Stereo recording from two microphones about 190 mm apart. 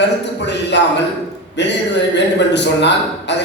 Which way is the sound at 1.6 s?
65° left (ahead or behind).